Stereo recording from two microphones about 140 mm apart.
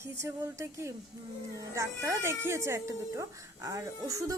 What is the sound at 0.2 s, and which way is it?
Speech, 20° right (ahead or behind).